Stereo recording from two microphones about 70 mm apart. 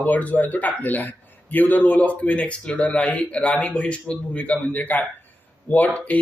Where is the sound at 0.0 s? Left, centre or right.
Left.